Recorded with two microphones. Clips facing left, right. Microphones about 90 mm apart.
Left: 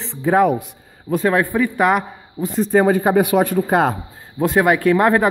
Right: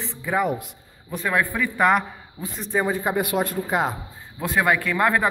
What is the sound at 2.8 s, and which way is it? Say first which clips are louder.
Speech: left 9 dB; 80° left.